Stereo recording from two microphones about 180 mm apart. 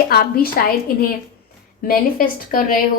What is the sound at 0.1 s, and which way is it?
Speech, 60° left (ahead or behind).